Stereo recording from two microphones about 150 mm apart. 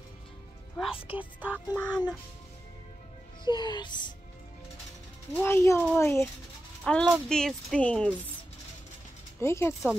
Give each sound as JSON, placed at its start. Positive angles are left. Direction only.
{"t": 0.9, "sound": "speech", "side_deg": 35}
{"t": 1.4, "sound": "speech", "side_deg": -10}
{"t": 1.8, "sound": "speech", "side_deg": 5}
{"t": 3.4, "sound": "speech", "side_deg": 30}
{"t": 5.3, "sound": "speech", "side_deg": 15}
{"t": 6.8, "sound": "speech", "side_deg": 5}
{"t": 9.4, "sound": "speech", "side_deg": 15}